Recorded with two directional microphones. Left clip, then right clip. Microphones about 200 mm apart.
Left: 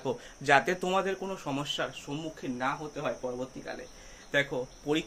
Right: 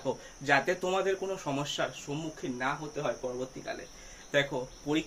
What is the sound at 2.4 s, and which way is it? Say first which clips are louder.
Speech: even; 20° left (ahead or behind).